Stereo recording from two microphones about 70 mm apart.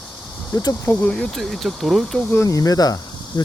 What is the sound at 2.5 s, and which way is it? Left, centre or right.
Speech, left.